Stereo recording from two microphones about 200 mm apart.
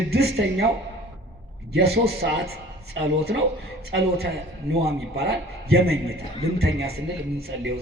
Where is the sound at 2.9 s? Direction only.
65° right (ahead or behind).